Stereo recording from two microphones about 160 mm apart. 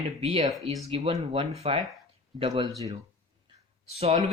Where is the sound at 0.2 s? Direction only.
35° right (ahead or behind).